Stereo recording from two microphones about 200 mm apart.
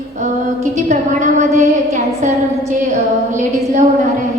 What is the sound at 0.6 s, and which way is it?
A woman's voice, 35° right (ahead or behind).